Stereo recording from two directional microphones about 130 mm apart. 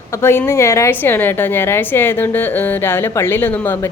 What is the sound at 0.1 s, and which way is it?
A woman's voice, 20° left (ahead or behind).